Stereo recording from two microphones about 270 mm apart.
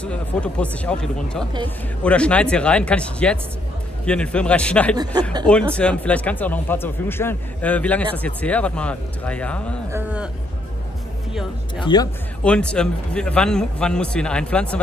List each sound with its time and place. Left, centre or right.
0.0 s speech: centre
9.8 s a sound: centre
11.8 s speech: centre
12.4 s speech: centre